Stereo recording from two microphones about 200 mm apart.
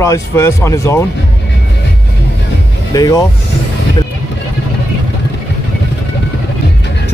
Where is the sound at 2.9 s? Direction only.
20° left (ahead or behind).